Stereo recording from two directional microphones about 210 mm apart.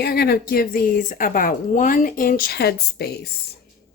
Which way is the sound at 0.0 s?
50° left (ahead or behind).